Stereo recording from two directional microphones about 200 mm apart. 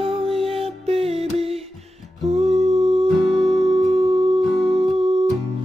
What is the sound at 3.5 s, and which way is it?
Music, 30° right (ahead or behind).